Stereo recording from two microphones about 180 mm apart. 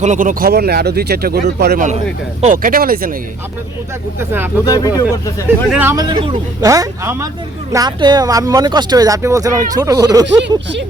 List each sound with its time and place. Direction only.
0.0 s speech: 45° right (ahead or behind)
4.2 s a man's voice: 15° right (ahead or behind)
4.6 s speech: 20° left (ahead or behind)
5.7 s a man's voice: 15° right (ahead or behind)